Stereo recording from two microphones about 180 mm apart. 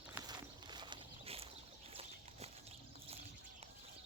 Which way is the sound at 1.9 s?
35° right (ahead or behind).